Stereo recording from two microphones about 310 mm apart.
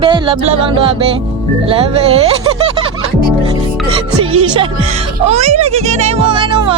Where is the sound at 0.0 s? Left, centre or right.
Centre.